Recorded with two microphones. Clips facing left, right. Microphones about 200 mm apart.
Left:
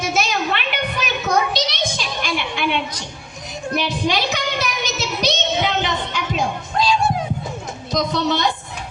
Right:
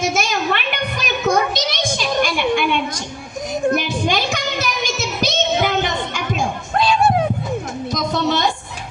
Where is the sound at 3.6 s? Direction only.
50° right (ahead or behind).